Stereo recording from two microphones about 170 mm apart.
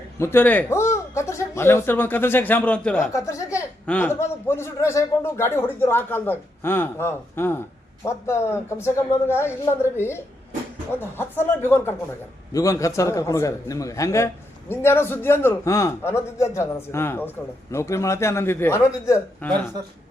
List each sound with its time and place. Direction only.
0.2 s speech: 15° left (ahead or behind)
3.1 s a sound: 20° left (ahead or behind)
3.8 s a man's voice: 10° left (ahead or behind)